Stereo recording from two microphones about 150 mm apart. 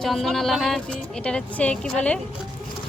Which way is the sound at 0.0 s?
Centre (ahead or behind).